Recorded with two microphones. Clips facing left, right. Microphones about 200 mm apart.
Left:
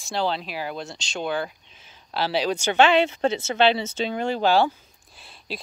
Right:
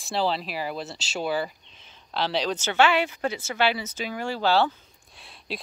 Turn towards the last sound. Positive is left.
turn(degrees=0)  # may be behind; listen again after turning